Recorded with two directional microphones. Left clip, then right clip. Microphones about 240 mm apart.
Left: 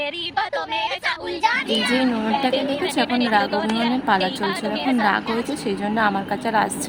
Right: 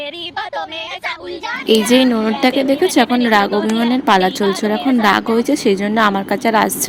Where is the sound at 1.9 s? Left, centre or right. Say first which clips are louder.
Right 7 dB; right.